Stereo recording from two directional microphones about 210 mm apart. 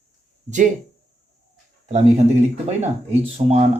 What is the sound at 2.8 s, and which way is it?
Speech, 30° right (ahead or behind).